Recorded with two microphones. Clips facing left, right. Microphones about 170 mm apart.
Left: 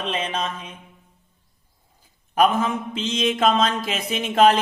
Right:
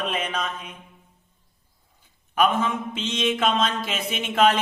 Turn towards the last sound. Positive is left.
turn(degrees=40)  # may be behind; listen again after turning